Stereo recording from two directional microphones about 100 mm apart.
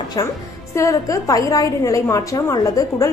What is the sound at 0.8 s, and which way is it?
A woman's voice, 35° left (ahead or behind).